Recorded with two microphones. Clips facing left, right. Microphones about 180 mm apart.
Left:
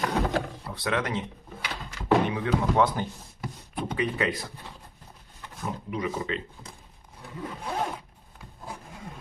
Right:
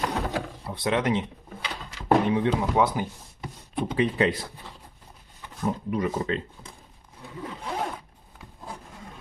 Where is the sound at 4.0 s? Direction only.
30° right (ahead or behind).